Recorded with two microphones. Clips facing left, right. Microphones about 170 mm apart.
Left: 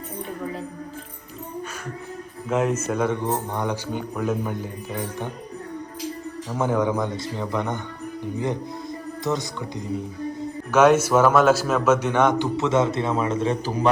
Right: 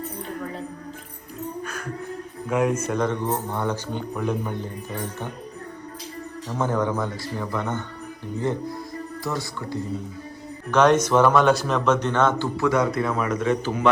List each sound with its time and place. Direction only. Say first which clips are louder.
2.5 s a man's voice: even; centre (ahead or behind)
4.1 s a man's voice: left 1 dB; 5° left (ahead or behind)
6.5 s a man's voice: left 2 dB; 10° left (ahead or behind)
9.2 s speech: left 4 dB; 20° left (ahead or behind)
10.7 s a man's voice: left 1 dB; 5° left (ahead or behind); by 13.9 s 35° left (ahead or behind)